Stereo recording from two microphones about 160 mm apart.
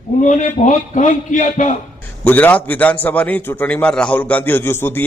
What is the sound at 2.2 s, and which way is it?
A man's voice, 10° left (ahead or behind).